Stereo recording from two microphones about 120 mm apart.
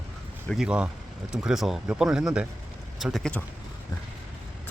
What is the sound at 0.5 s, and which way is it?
Speech, 5° right (ahead or behind).